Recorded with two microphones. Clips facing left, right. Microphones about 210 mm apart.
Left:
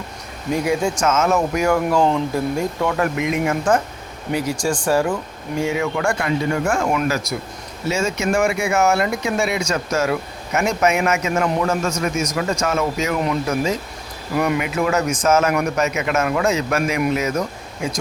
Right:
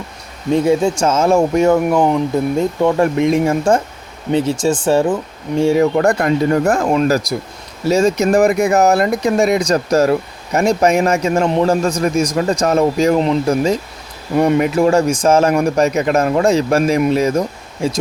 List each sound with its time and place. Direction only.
0.5 s speech: 25° right (ahead or behind)